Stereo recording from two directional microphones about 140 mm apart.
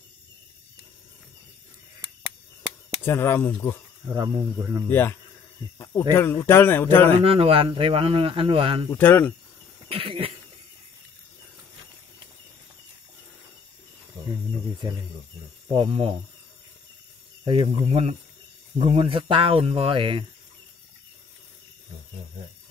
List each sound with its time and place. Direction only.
3.0 s speech: 15° left (ahead or behind)
4.1 s speech: 25° right (ahead or behind)
4.8 s speech: 15° left (ahead or behind)
6.1 s speech: 15° left (ahead or behind)
7.2 s speech: 45° right (ahead or behind)
8.9 s speech: 10° left (ahead or behind)
9.8 s cough: 40° right (ahead or behind)
15.7 s speech: 35° right (ahead or behind)
17.5 s speech: 45° right (ahead or behind)